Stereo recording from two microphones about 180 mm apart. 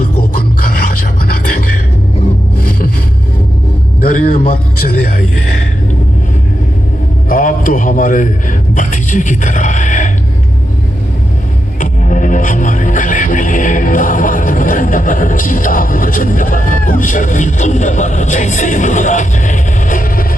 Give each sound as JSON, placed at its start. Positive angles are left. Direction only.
{"t": 4.4, "sound": "speech", "side_deg": 50}
{"t": 7.3, "sound": "speech", "side_deg": 50}
{"t": 11.8, "sound": "music", "side_deg": 45}